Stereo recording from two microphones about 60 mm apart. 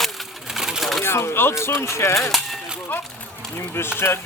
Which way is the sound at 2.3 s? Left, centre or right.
Centre.